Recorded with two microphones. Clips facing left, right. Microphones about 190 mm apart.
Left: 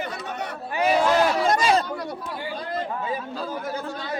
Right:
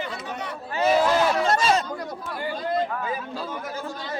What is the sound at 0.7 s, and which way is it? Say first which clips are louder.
Speech: even; 15° left (ahead or behind).